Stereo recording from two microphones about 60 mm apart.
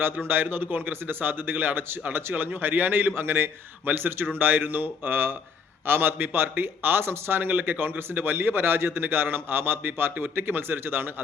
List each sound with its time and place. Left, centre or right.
0.3 s speech: right